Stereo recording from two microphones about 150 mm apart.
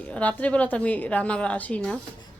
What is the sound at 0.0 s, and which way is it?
A woman's voice, 10° left (ahead or behind).